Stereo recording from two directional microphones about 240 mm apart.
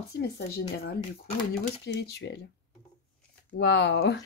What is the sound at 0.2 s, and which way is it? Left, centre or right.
Speech, left.